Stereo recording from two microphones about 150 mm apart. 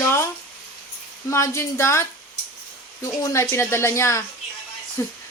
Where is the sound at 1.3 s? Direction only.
20° left (ahead or behind).